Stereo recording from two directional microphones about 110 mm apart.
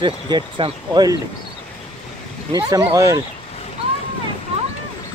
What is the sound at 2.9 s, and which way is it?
Speech, 30° right (ahead or behind).